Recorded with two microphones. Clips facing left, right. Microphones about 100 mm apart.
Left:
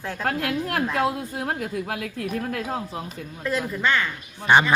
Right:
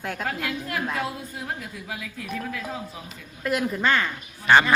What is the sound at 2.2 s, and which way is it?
Speech, 55° left (ahead or behind).